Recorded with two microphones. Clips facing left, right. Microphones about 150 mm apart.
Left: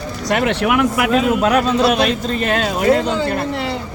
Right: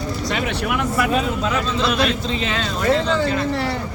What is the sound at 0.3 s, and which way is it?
A man's voice, 60° left (ahead or behind).